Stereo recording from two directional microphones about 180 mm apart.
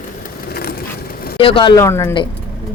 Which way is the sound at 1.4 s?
30° left (ahead or behind).